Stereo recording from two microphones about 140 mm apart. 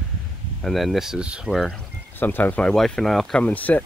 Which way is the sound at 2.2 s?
15° left (ahead or behind).